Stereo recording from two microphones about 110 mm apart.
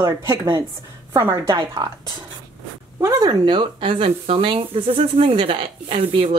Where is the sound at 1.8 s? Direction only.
40° right (ahead or behind).